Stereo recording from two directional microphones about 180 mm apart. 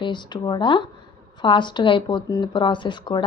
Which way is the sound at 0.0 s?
25° left (ahead or behind).